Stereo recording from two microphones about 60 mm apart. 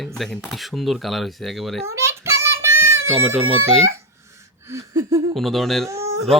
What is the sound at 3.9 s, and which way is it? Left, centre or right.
Hiccup, right.